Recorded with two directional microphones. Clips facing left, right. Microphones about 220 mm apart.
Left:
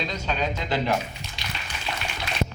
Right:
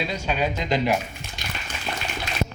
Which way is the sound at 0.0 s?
10° right (ahead or behind).